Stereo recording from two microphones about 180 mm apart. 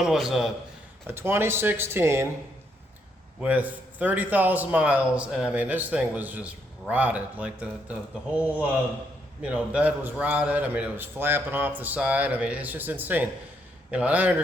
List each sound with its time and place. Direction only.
0.0 s a man's voice: centre (ahead or behind)
1.0 s a man's voice: 10° right (ahead or behind)
3.4 s a man's voice: 10° right (ahead or behind)
9.4 s a man's voice: 5° right (ahead or behind)